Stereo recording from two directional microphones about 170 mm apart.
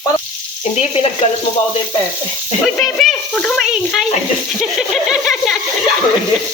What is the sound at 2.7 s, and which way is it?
Speech, centre (ahead or behind).